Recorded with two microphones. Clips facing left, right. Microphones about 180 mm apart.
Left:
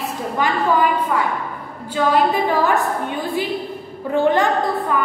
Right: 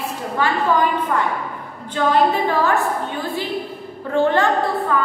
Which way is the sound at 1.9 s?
10° left (ahead or behind).